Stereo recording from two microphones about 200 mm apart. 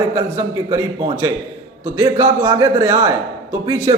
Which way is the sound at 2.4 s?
20° right (ahead or behind).